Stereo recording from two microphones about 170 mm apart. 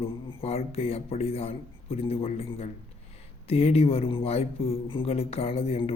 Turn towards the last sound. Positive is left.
turn(degrees=35)  # may be behind; listen again after turning